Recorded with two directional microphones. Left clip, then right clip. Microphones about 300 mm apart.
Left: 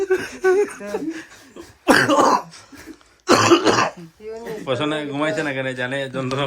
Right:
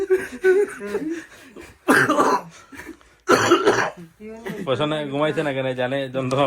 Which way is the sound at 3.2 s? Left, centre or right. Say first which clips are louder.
Left 2 dB; left.